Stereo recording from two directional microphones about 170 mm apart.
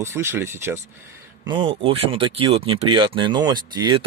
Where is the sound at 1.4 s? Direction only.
30° right (ahead or behind).